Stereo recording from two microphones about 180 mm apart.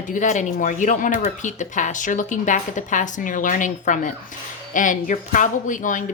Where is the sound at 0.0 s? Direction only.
45° left (ahead or behind).